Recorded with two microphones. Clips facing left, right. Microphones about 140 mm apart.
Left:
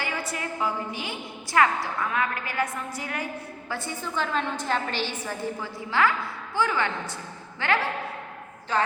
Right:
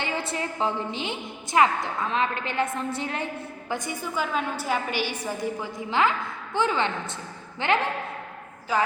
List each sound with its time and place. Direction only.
0.0 s a woman's voice: 25° right (ahead or behind)
3.7 s a woman's voice: 15° right (ahead or behind)